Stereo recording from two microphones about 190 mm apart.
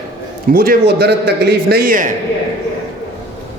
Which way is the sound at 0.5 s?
50° right (ahead or behind).